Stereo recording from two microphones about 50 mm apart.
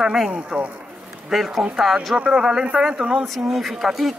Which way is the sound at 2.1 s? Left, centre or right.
Right.